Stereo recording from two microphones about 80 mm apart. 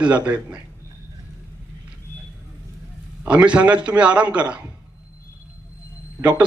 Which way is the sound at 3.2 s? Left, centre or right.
Centre.